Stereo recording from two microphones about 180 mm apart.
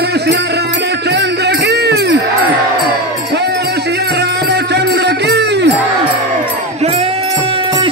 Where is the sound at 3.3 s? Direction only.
70° right (ahead or behind).